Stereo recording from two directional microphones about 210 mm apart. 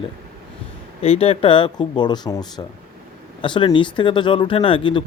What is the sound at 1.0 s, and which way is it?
Speech, 30° left (ahead or behind).